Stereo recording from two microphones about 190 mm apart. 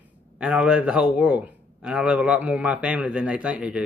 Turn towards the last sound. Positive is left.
turn(degrees=-5)  # may be behind; listen again after turning